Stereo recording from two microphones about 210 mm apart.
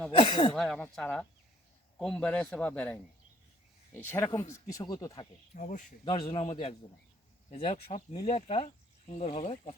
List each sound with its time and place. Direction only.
0.2 s speech: 25° left (ahead or behind)
0.5 s speech: centre (ahead or behind)
5.5 s speech: 35° left (ahead or behind)
6.1 s speech: 20° left (ahead or behind)